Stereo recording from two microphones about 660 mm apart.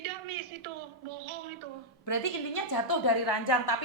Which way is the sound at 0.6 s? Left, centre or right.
Right.